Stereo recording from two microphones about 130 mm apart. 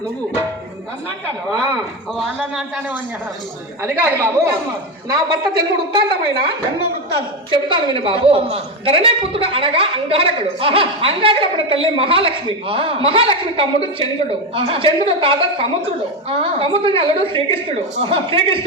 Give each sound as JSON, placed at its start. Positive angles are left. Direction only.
{"t": 2.1, "sound": "a man's voice", "side_deg": 0}
{"t": 3.8, "sound": "a woman's voice", "side_deg": -20}
{"t": 5.0, "sound": "a woman's voice", "side_deg": -35}
{"t": 7.5, "sound": "a woman's voice", "side_deg": -40}